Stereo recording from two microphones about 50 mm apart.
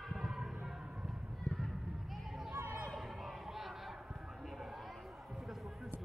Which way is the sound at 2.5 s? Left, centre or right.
Right.